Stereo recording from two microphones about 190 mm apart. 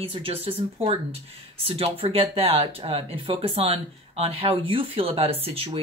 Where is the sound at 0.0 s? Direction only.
30° right (ahead or behind).